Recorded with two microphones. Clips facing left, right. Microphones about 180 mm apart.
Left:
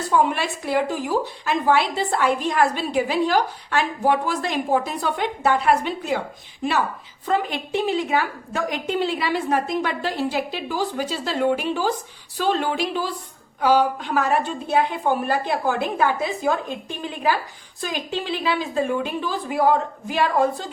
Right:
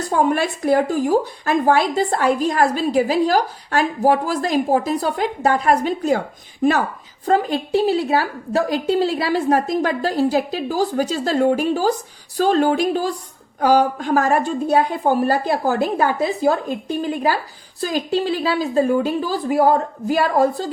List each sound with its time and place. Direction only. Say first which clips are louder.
0.1 s a woman's voice: right 2 dB; 45° right (ahead or behind)